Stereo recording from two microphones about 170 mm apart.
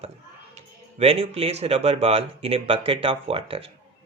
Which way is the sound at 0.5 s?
35° right (ahead or behind).